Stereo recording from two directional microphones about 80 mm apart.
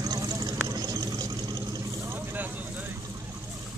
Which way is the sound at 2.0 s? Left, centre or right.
Right.